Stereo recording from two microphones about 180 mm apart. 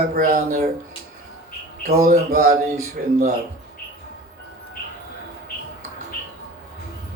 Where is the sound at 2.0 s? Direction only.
45° right (ahead or behind).